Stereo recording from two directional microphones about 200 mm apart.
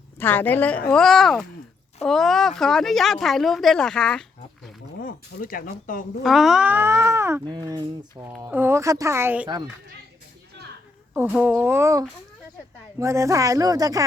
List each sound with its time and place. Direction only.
0.2 s a woman's voice: 10° left (ahead or behind)
5.0 s speech: 45° left (ahead or behind)
6.2 s speech: centre (ahead or behind)
11.1 s speech: 5° right (ahead or behind)